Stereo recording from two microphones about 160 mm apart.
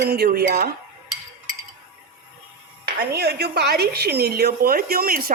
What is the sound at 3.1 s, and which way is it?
A woman's voice, 85° right.